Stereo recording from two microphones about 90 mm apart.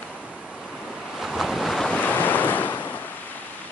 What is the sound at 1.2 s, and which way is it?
Waves, 5° right (ahead or behind).